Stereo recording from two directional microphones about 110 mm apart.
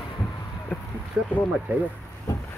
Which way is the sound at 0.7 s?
15° left (ahead or behind).